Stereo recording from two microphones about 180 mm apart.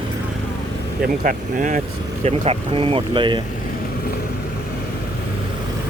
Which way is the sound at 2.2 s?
35° right (ahead or behind).